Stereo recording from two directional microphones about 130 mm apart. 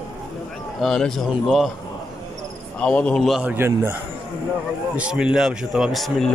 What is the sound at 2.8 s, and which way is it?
Speech, 10° left (ahead or behind).